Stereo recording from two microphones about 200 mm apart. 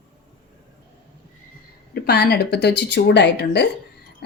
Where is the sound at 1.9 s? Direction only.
55° left (ahead or behind).